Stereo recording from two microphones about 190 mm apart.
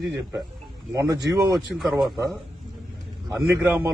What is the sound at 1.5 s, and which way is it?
Speech, centre (ahead or behind).